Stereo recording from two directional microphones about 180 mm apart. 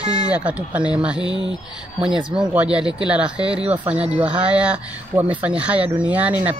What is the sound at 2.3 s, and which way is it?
Speech, 5° right (ahead or behind).